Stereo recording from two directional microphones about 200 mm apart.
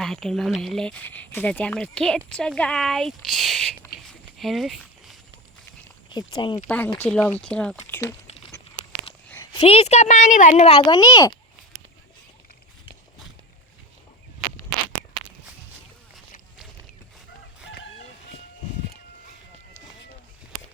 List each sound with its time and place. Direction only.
0.0 s speech: centre (ahead or behind)
6.1 s speech: 25° left (ahead or behind)
6.7 s speech: 10° left (ahead or behind)
9.6 s speech: 30° left (ahead or behind)